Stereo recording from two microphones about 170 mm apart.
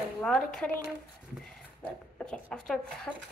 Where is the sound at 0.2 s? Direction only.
5° left (ahead or behind).